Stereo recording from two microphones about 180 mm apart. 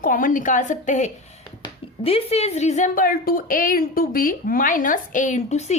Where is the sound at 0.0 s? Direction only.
50° left (ahead or behind).